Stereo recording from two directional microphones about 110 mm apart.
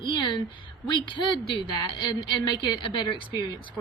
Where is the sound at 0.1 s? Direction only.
40° left (ahead or behind).